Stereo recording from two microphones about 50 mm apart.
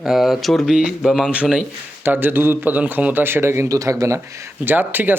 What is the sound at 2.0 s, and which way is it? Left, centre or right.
Speech, right.